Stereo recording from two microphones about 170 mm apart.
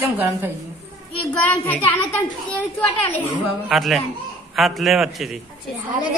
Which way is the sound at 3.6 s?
Centre (ahead or behind).